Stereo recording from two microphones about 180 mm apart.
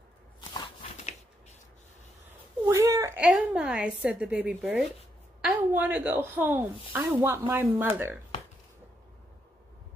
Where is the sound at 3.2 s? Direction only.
5° right (ahead or behind).